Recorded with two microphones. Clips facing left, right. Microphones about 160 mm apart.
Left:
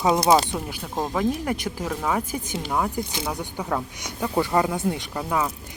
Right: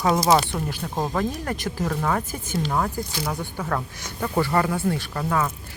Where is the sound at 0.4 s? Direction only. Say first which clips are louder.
Right 1 dB; 15° left (ahead or behind).